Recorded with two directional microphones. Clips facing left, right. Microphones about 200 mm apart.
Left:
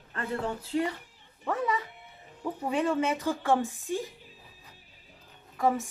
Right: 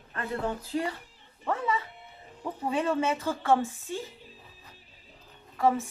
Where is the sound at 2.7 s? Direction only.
15° left (ahead or behind).